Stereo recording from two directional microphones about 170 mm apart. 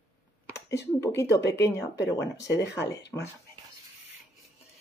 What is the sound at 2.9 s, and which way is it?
Speech, 20° left (ahead or behind).